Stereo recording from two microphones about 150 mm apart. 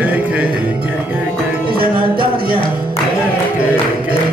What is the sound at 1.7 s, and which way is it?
Music, 80° right.